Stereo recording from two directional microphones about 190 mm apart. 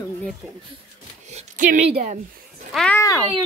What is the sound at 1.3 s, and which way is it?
Speech, 40° right (ahead or behind).